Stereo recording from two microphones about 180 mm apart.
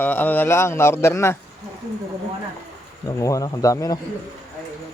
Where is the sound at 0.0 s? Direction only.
10° left (ahead or behind).